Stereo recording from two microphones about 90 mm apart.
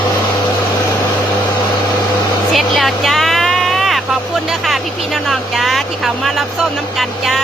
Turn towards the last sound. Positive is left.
turn(degrees=0)  # may be behind; listen again after turning